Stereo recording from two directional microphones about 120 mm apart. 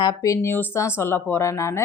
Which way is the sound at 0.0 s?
25° left (ahead or behind).